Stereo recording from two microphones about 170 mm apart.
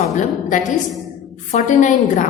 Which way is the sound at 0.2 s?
50° left (ahead or behind).